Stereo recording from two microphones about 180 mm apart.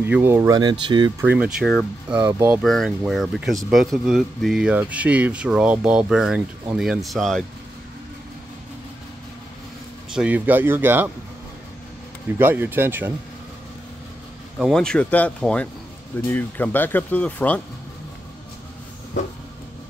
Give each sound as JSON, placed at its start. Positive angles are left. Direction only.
{"t": 0.0, "sound": "speech", "side_deg": -10}
{"t": 1.2, "sound": "speech", "side_deg": -5}
{"t": 2.6, "sound": "speech", "side_deg": 0}
{"t": 10.1, "sound": "speech", "side_deg": -10}
{"t": 12.4, "sound": "speech", "side_deg": -10}
{"t": 14.6, "sound": "speech", "side_deg": 5}